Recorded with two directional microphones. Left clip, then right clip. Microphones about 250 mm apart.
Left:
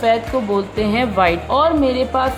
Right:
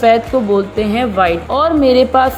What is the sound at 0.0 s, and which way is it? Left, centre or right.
A woman's voice, centre.